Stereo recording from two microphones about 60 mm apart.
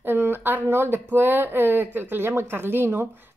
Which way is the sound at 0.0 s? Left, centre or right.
Right.